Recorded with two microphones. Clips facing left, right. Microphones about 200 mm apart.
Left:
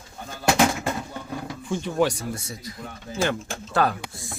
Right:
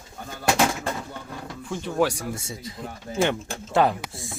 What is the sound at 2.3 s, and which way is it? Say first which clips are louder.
Speech: right 1 dB; 25° right (ahead or behind).